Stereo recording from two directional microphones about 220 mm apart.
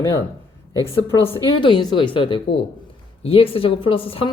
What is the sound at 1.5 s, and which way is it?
Speech, 20° left (ahead or behind).